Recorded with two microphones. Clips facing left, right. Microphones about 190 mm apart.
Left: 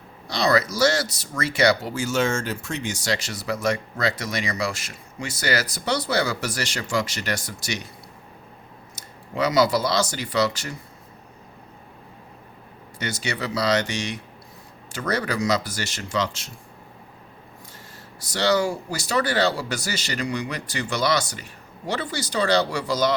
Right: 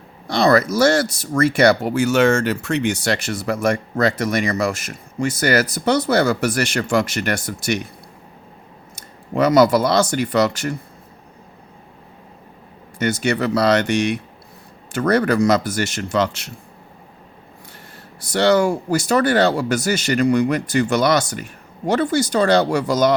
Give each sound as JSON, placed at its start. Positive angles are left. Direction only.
{"t": 0.3, "sound": "speech", "side_deg": -55}
{"t": 9.3, "sound": "speech", "side_deg": -55}
{"t": 13.0, "sound": "speech", "side_deg": -50}
{"t": 18.2, "sound": "speech", "side_deg": -55}